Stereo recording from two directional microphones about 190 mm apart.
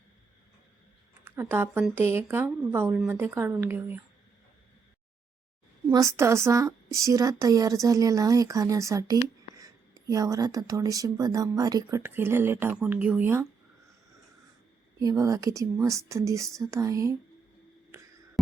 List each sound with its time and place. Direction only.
1.2 s speech: 10° right (ahead or behind)
5.9 s speech: 15° right (ahead or behind)
14.9 s speech: 15° right (ahead or behind)